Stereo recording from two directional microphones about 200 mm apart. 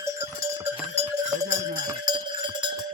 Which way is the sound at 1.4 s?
20° right (ahead or behind).